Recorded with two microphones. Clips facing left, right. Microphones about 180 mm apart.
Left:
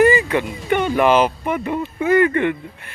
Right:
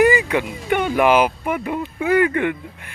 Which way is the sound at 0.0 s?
15° right (ahead or behind).